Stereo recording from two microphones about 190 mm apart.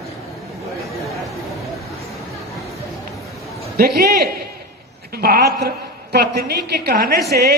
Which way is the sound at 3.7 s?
55° right (ahead or behind).